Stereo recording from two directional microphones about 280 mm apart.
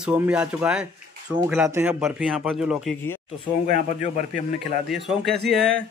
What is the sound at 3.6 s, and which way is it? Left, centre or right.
Speech, right.